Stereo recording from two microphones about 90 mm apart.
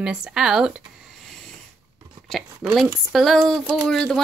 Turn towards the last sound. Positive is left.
turn(degrees=5)  # may be behind; listen again after turning